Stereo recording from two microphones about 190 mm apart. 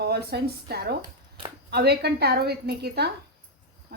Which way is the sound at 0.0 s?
55° right (ahead or behind).